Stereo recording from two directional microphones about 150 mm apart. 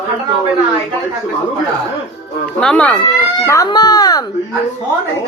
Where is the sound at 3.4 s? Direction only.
20° left (ahead or behind).